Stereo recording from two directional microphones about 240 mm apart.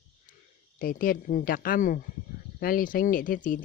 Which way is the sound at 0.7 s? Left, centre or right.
Left.